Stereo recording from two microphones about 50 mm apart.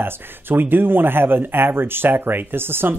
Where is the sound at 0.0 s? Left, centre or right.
Right.